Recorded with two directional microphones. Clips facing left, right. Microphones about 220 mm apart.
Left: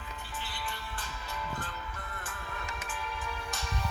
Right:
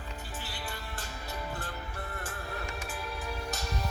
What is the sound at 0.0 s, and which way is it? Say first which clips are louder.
Music: right 1 dB; 40° right (ahead or behind).